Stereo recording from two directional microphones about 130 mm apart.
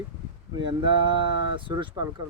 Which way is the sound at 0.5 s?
40° right (ahead or behind).